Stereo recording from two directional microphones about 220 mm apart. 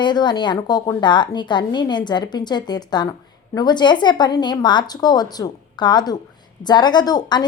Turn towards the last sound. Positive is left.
turn(degrees=20)  # may be behind; listen again after turning